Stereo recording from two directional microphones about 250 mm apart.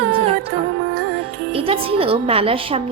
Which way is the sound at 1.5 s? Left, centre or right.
Right.